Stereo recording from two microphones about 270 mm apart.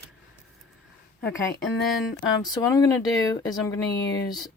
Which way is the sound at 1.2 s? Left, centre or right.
Centre.